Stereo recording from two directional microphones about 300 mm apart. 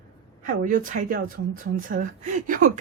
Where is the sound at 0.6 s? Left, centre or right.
Right.